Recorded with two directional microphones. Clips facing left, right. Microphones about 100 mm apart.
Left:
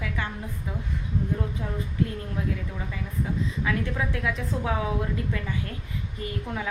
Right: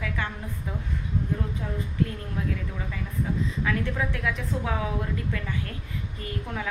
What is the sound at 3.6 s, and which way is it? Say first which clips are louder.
A woman's voice: even; 20° left (ahead or behind).